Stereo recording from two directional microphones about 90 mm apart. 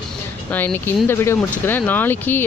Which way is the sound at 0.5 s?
25° left (ahead or behind).